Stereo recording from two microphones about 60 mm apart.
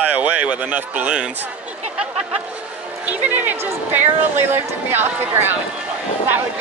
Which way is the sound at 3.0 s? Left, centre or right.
Right.